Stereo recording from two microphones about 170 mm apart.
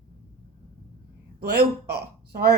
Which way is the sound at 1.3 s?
70° right (ahead or behind).